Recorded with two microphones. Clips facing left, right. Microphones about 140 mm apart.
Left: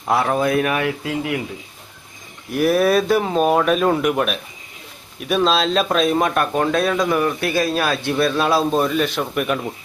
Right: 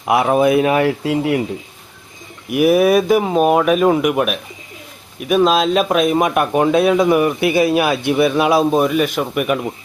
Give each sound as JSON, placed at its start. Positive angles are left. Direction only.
{"t": 0.1, "sound": "speech", "side_deg": -20}
{"t": 2.5, "sound": "speech", "side_deg": -15}